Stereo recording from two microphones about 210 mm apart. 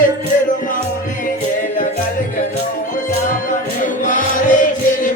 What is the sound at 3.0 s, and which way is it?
Music, 40° left (ahead or behind).